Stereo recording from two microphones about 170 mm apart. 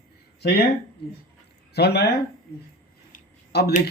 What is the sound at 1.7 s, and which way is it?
Speech, 75° left (ahead or behind).